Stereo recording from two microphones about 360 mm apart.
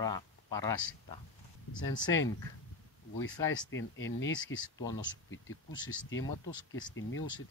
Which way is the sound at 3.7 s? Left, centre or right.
Left.